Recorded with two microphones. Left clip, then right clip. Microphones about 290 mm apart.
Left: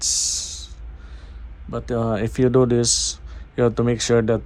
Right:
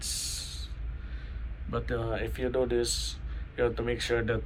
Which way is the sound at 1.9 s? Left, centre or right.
Left.